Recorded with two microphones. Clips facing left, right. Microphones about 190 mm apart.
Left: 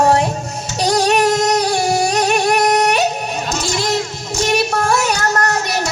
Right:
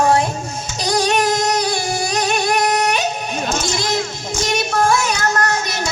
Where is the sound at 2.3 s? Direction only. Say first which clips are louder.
Left 1 dB; 70° left (ahead or behind).